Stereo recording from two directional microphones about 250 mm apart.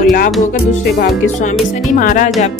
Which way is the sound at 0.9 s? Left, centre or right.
Left.